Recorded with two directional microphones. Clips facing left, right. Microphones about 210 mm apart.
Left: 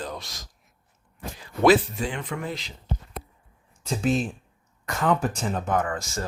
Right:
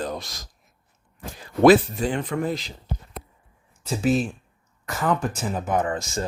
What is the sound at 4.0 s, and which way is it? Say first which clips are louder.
Speech: right 3 dB; 5° right (ahead or behind).